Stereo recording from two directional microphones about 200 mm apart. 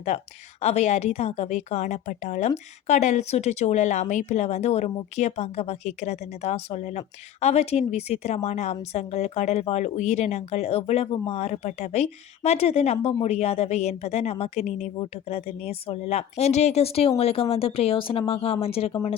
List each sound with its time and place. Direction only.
0.1 s a woman's voice: 35° left (ahead or behind)